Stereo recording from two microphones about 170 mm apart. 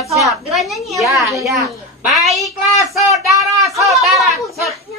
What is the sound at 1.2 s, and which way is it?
Speech, 20° right (ahead or behind).